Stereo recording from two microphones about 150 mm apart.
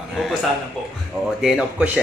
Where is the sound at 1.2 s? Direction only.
Centre (ahead or behind).